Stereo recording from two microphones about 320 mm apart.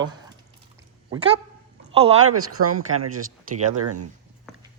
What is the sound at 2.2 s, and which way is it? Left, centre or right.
Speech, right.